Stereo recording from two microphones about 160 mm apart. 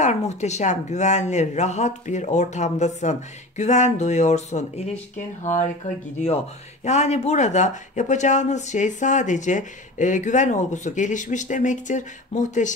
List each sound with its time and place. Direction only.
0.0 s speech: 45° left (ahead or behind)
6.8 s speech: 45° left (ahead or behind)